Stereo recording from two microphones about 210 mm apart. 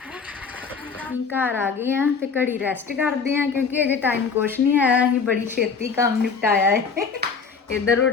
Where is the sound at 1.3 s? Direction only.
10° right (ahead or behind).